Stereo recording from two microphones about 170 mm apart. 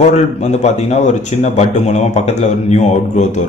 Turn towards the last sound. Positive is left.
turn(degrees=40)  # may be behind; listen again after turning